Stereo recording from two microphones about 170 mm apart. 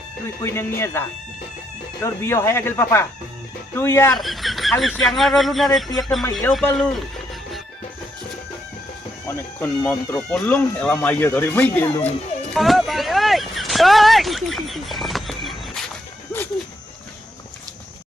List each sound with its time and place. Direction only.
0.4 s speech: 15° left (ahead or behind)
4.2 s speech: centre (ahead or behind)
9.2 s speech: 10° left (ahead or behind)
12.5 s a sound: centre (ahead or behind)